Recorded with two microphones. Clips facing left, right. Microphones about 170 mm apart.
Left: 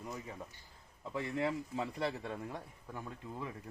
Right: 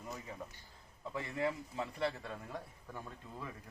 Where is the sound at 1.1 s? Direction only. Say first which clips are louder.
Left 2 dB; 20° left (ahead or behind).